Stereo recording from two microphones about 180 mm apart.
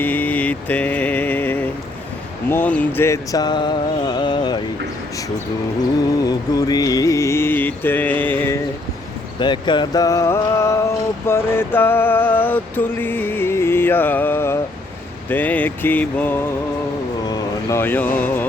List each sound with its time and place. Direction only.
0.0 s mantra: 10° left (ahead or behind)
6.2 s mantra: 20° left (ahead or behind)
9.4 s mantra: 25° left (ahead or behind)
11.3 s a sound: 15° left (ahead or behind)
15.3 s mantra: 10° left (ahead or behind)
17.2 s speech: 15° left (ahead or behind)